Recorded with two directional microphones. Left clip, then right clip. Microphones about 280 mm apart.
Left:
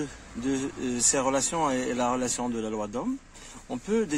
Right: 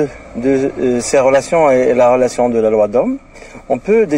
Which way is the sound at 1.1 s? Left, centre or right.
Left.